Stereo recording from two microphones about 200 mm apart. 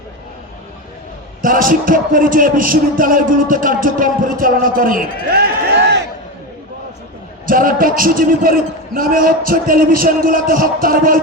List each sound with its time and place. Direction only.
1.4 s speech: 40° right (ahead or behind)
7.4 s speech: 45° right (ahead or behind)